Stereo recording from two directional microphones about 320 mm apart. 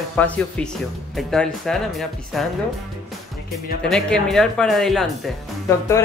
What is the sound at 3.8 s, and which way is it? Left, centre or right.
Speech, centre.